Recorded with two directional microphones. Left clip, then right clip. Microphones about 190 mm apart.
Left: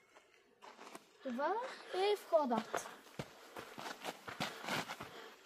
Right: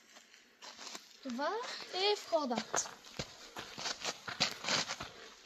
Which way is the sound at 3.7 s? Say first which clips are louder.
Right 7 dB; 25° right (ahead or behind).